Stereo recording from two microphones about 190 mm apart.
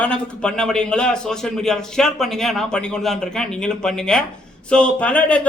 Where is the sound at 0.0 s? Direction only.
5° left (ahead or behind).